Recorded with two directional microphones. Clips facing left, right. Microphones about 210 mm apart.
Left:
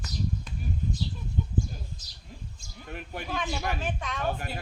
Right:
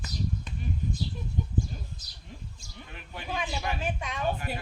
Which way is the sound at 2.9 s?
50° left (ahead or behind).